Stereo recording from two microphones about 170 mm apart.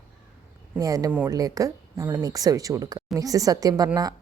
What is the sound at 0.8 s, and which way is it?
A woman's voice, 20° right (ahead or behind).